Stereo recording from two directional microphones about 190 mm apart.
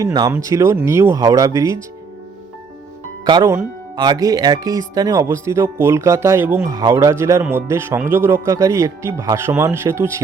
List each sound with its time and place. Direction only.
0.0 s a man's voice: 20° right (ahead or behind)
3.2 s a man's voice: 20° right (ahead or behind)